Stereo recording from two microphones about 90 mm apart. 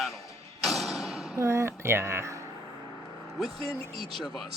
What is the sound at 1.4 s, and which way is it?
Speech, 30° right (ahead or behind).